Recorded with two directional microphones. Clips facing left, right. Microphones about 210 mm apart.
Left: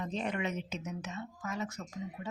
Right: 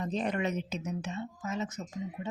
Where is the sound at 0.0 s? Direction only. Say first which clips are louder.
Right 4 dB; 40° right (ahead or behind).